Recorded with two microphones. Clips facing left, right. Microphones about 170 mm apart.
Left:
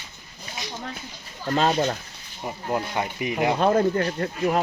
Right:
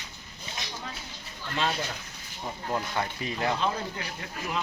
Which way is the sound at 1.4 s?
40° left (ahead or behind).